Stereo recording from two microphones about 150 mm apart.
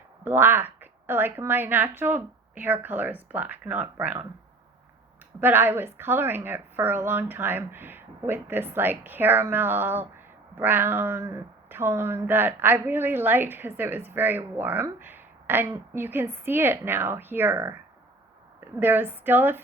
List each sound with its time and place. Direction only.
0.3 s speech: 15° right (ahead or behind)
5.4 s speech: 15° right (ahead or behind)